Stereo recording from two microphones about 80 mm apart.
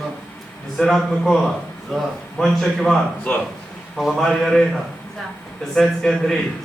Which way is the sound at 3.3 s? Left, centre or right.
Centre.